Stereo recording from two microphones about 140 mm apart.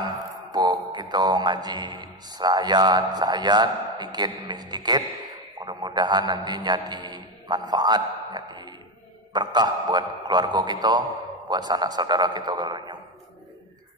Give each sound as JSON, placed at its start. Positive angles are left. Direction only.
{"t": 0.0, "sound": "a man's voice", "side_deg": -30}